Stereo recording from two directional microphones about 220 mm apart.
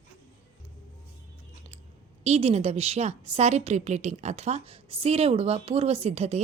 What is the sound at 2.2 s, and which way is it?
A woman's voice, 30° right (ahead or behind).